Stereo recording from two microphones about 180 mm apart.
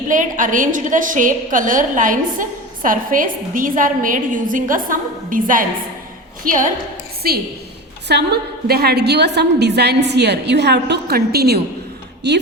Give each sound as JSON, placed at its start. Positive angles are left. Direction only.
{"t": 0.1, "sound": "a woman's voice", "side_deg": -45}
{"t": 8.0, "sound": "a woman's voice", "side_deg": -65}